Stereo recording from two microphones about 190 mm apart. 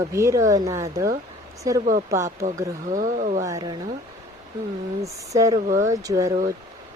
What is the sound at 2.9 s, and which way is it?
Speech, 40° right (ahead or behind).